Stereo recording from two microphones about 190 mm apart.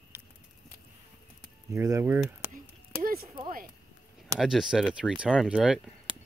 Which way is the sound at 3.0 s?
50° right (ahead or behind).